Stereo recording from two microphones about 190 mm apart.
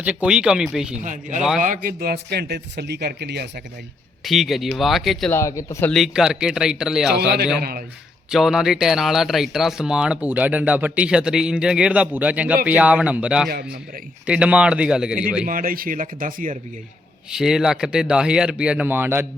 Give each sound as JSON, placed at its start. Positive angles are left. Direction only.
{"t": 0.0, "sound": "speech", "side_deg": -5}
{"t": 1.0, "sound": "speech", "side_deg": -40}
{"t": 4.2, "sound": "speech", "side_deg": 0}
{"t": 5.3, "sound": "speech", "side_deg": 15}
{"t": 5.9, "sound": "speech", "side_deg": 0}
{"t": 7.1, "sound": "speech", "side_deg": -60}
{"t": 8.3, "sound": "speech", "side_deg": 0}
{"t": 13.5, "sound": "speech", "side_deg": -55}
{"t": 14.3, "sound": "speech", "side_deg": -5}
{"t": 15.4, "sound": "speech", "side_deg": -50}
{"t": 17.3, "sound": "speech", "side_deg": -5}